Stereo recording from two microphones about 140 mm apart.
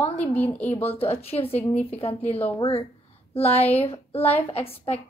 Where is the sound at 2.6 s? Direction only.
35° left (ahead or behind).